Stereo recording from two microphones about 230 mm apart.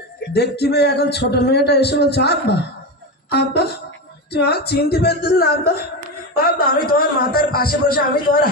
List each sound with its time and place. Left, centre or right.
0.3 s a man's voice: left